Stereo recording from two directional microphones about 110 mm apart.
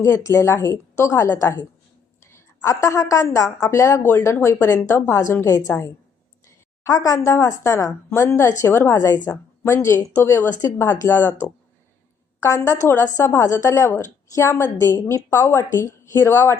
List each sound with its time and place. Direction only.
0.0 s a woman's voice: 25° left (ahead or behind)